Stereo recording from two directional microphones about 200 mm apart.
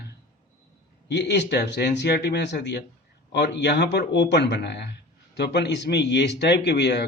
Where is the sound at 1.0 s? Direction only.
60° left (ahead or behind).